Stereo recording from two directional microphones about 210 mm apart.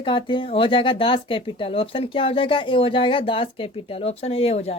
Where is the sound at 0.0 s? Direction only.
20° left (ahead or behind).